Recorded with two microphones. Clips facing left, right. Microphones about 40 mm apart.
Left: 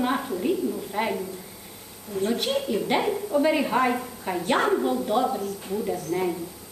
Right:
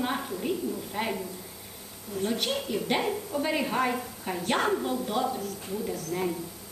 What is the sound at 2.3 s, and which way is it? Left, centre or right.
A woman's voice, centre.